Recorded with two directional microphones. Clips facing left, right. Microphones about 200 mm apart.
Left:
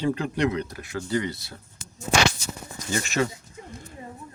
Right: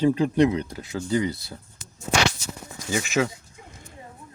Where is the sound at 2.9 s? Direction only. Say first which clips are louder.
Right 2 dB; 5° right (ahead or behind).